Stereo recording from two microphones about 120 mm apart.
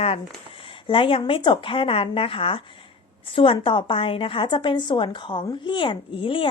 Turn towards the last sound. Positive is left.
turn(degrees=45)  # may be behind; listen again after turning